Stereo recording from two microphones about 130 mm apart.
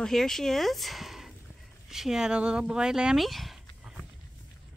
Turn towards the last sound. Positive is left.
turn(degrees=0)  # may be behind; listen again after turning